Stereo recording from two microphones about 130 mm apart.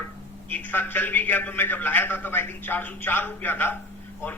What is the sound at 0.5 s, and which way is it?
A man's voice, 15° left (ahead or behind).